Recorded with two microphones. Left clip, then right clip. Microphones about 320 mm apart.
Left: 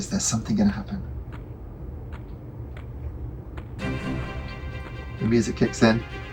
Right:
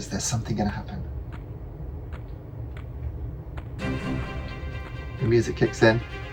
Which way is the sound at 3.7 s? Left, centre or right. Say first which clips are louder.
Even; centre.